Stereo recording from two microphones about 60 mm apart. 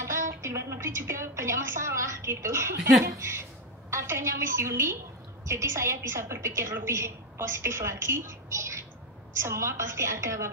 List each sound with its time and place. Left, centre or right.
0.0 s a woman's voice: right